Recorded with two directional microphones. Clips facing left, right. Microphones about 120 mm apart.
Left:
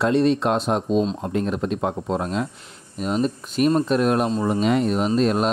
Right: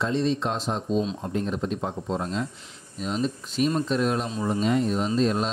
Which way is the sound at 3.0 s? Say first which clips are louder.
Left 5 dB; 55° left (ahead or behind).